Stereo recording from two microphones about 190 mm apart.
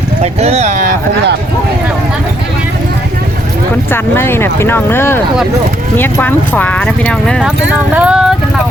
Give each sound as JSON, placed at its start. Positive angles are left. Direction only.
{"t": 0.2, "sound": "speech", "side_deg": -35}
{"t": 3.9, "sound": "speech", "side_deg": 10}